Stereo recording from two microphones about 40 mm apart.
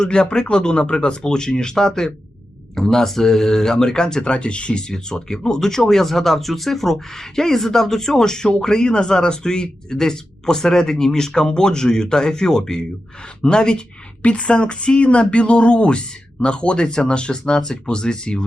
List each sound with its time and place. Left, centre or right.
0.0 s speech: left
14.2 s speech: left